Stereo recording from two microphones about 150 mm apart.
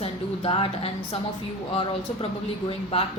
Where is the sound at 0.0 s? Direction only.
40° left (ahead or behind).